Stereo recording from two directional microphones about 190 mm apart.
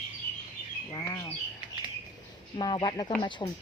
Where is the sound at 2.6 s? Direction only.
25° left (ahead or behind).